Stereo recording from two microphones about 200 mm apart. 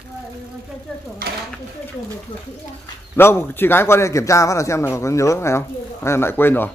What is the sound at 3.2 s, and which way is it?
A man's voice, 10° left (ahead or behind).